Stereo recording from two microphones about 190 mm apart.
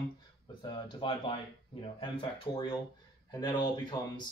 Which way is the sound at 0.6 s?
25° left (ahead or behind).